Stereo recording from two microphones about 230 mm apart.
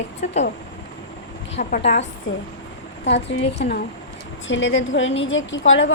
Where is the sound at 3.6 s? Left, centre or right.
Left.